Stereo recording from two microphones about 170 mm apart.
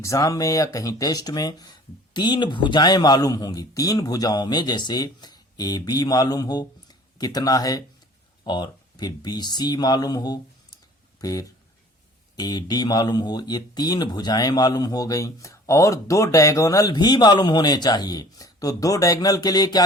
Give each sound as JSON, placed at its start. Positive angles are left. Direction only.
{"t": 0.0, "sound": "speech", "side_deg": 20}